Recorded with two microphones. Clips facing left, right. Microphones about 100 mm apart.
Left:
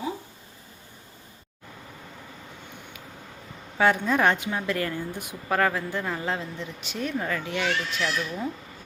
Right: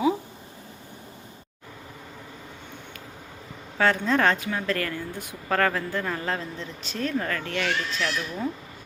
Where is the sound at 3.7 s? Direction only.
10° left (ahead or behind).